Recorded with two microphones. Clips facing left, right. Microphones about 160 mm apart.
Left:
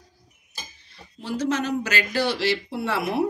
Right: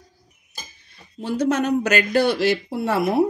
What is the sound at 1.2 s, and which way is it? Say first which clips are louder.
A woman's voice: right 4 dB; 50° right (ahead or behind).